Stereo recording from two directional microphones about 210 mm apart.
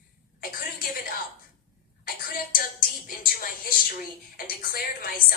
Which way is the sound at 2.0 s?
45° left (ahead or behind).